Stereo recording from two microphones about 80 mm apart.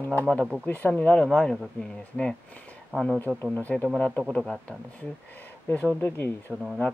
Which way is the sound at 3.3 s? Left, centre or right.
Right.